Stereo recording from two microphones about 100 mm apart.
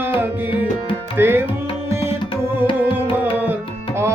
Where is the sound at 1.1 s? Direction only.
20° right (ahead or behind).